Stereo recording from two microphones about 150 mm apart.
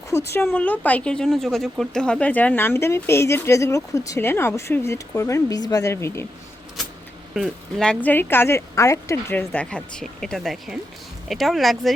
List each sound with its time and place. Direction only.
0.1 s speech: 20° left (ahead or behind)
7.3 s speech: centre (ahead or behind)